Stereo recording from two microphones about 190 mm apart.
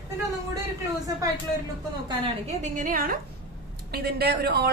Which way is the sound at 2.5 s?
40° right (ahead or behind).